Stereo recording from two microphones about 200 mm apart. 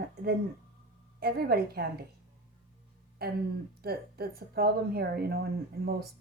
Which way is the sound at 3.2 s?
50° right (ahead or behind).